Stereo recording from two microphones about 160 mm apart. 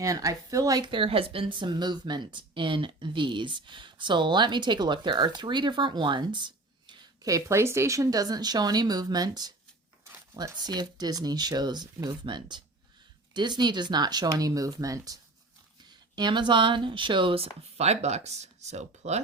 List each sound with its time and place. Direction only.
0.0 s speech: 20° right (ahead or behind)
10.0 s a sound: 20° right (ahead or behind)
10.6 s speech: 25° right (ahead or behind); by 19.2 s 45° right (ahead or behind)